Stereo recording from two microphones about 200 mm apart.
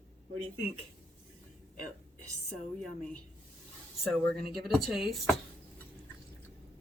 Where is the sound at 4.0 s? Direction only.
Centre (ahead or behind).